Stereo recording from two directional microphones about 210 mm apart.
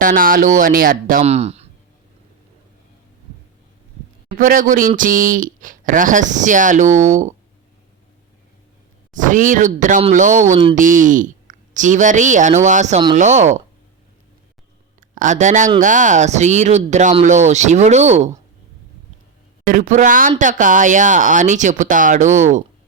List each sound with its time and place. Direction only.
0.0 s speech: 40° right (ahead or behind)
4.4 s speech: 40° right (ahead or behind)
9.1 s speech: 40° right (ahead or behind)
15.1 s speech: 35° right (ahead or behind)
19.6 s speech: 40° right (ahead or behind)